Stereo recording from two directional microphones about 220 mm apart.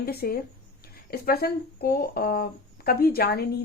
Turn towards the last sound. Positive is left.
turn(degrees=45)  # may be behind; listen again after turning